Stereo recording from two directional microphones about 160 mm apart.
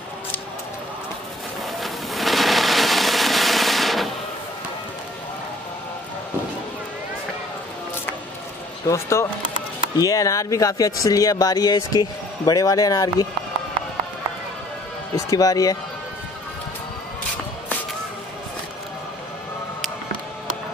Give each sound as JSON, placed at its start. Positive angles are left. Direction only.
{"t": 1.8, "sound": "a sound", "side_deg": 0}
{"t": 8.8, "sound": "speech", "side_deg": 15}
{"t": 15.1, "sound": "speech", "side_deg": 20}